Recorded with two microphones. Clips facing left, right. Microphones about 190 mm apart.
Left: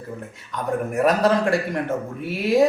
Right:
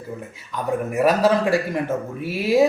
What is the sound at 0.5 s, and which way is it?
A man's voice, centre (ahead or behind).